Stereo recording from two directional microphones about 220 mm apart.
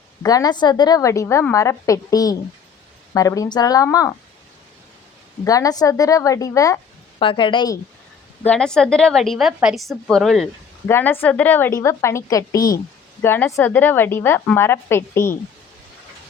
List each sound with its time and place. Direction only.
0.2 s a woman's voice: 15° left (ahead or behind)
5.5 s a woman's voice: 15° left (ahead or behind)
8.4 s a woman's voice: 5° left (ahead or behind)